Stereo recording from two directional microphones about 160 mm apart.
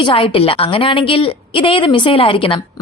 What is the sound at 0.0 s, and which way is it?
A woman's voice, 35° left (ahead or behind).